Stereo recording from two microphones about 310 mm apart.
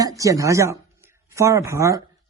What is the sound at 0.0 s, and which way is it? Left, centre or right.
Speech, centre.